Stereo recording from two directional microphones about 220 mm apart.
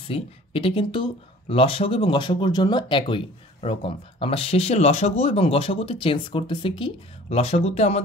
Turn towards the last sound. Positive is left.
turn(degrees=30)  # may be behind; listen again after turning